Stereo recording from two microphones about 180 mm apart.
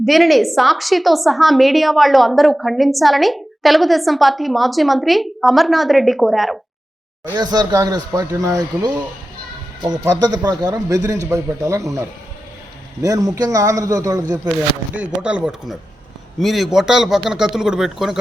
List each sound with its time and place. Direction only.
0.0 s a woman's voice: centre (ahead or behind)
7.3 s speech: 20° right (ahead or behind)
14.9 s a woman's voice: 5° right (ahead or behind)